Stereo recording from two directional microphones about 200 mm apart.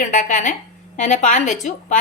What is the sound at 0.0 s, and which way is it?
A woman's voice, 40° left (ahead or behind).